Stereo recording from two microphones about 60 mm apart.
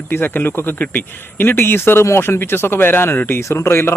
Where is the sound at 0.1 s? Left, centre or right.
Left.